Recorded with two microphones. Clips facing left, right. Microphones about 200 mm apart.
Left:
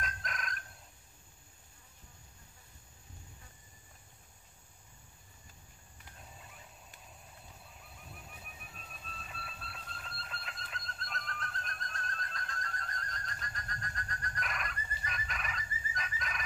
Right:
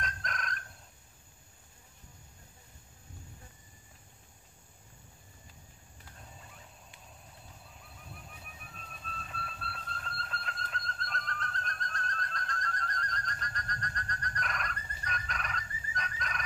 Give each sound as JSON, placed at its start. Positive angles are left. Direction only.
{"t": 0.0, "sound": "fowl", "side_deg": 0}
{"t": 6.3, "sound": "fowl", "side_deg": 5}
{"t": 8.1, "sound": "a sound", "side_deg": 5}